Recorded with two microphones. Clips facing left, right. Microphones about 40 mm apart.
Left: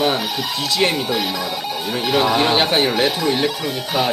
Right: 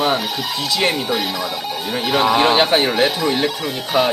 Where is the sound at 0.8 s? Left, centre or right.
Centre.